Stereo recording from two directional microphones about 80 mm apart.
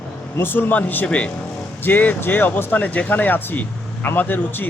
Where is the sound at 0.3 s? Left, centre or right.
Left.